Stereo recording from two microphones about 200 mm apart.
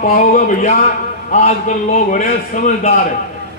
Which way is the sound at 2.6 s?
40° left (ahead or behind).